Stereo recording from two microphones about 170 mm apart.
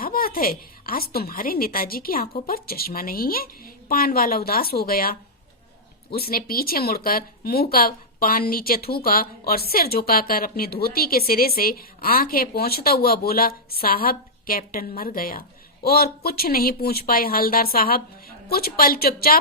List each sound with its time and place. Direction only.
0.0 s speech: 60° left (ahead or behind)
6.1 s speech: 60° left (ahead or behind)